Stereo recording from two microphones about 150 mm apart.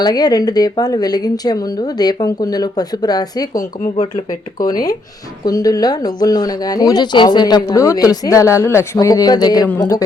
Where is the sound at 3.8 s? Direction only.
45° left (ahead or behind).